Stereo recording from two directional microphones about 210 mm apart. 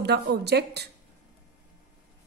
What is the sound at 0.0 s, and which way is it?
Speech, 50° right (ahead or behind).